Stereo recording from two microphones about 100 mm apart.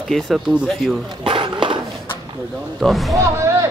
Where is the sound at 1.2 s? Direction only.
55° right (ahead or behind).